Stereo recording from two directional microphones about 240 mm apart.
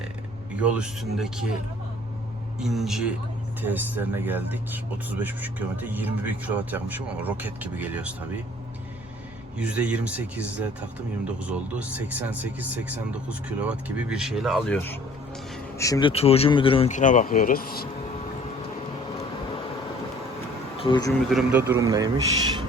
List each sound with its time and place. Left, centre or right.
0.5 s speech: centre
2.6 s speech: centre
9.6 s speech: centre
15.8 s speech: centre; by 17.7 s left
20.7 s speech: centre
21.2 s speech: centre
21.6 s speech: centre